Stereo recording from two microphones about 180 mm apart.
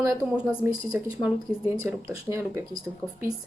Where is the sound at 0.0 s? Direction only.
20° right (ahead or behind).